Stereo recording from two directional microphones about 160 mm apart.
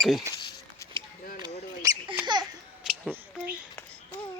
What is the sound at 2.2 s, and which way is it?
Laughter, 25° right (ahead or behind).